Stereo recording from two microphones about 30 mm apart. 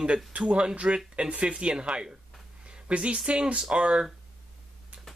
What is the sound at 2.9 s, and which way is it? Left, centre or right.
Speech, right.